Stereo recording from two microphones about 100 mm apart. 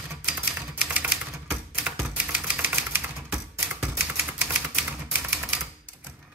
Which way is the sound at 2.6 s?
20° right (ahead or behind).